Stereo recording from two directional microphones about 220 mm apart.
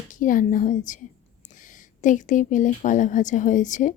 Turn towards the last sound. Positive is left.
turn(degrees=35)  # may be behind; listen again after turning